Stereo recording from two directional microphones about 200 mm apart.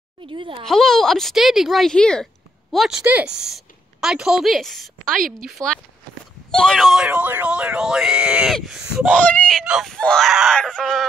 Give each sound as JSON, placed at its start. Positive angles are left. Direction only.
{"t": 0.3, "sound": "speech", "side_deg": -25}
{"t": 0.7, "sound": "speech", "side_deg": 0}